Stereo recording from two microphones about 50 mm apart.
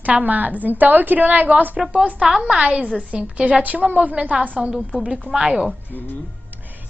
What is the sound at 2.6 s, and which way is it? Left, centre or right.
A woman's voice, right.